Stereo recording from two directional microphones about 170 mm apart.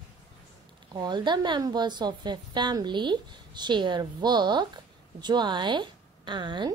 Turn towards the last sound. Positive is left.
turn(degrees=-25)  # may be behind; listen again after turning